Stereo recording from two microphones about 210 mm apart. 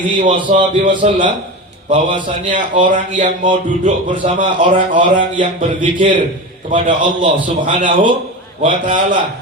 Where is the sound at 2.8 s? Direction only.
40° right (ahead or behind).